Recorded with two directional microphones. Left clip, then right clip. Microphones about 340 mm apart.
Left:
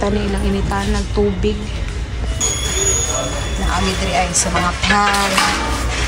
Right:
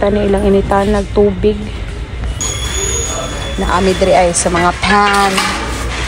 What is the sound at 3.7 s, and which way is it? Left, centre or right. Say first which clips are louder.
Speech: right 9 dB; centre.